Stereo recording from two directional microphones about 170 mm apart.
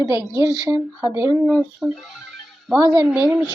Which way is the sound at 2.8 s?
20° right (ahead or behind).